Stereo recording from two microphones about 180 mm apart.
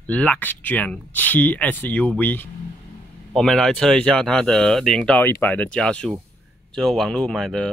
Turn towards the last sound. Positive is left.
turn(degrees=5)  # may be behind; listen again after turning